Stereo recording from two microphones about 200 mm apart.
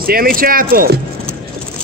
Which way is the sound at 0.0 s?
45° right (ahead or behind).